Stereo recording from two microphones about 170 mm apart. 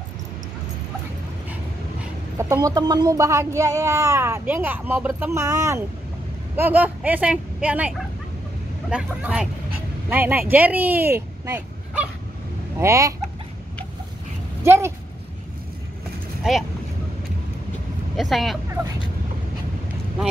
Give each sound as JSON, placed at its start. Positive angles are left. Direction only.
{"t": 1.5, "sound": "speech", "side_deg": -10}
{"t": 8.9, "sound": "speech", "side_deg": -5}
{"t": 14.6, "sound": "speech", "side_deg": -15}
{"t": 16.5, "sound": "speech", "side_deg": -5}
{"t": 18.1, "sound": "speech", "side_deg": 0}